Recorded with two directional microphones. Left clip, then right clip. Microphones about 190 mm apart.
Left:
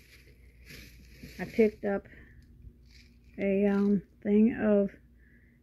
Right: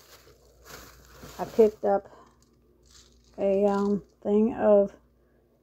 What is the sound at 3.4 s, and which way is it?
Speech, 10° right (ahead or behind).